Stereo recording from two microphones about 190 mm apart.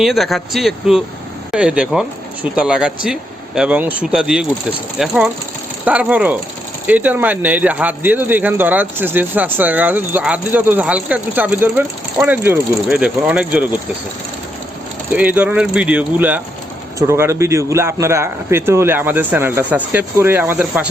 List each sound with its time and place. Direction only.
0.0 s speech: centre (ahead or behind)
15.1 s speech: 10° right (ahead or behind)